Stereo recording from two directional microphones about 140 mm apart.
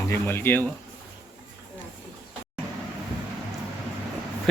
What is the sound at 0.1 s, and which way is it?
Speech, 15° left (ahead or behind).